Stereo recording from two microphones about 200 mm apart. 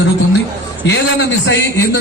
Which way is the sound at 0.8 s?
65° left (ahead or behind).